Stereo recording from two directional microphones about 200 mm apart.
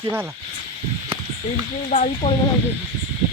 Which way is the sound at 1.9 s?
40° left (ahead or behind).